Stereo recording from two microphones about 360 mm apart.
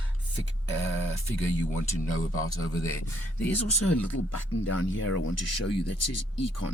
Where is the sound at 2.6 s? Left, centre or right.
Centre.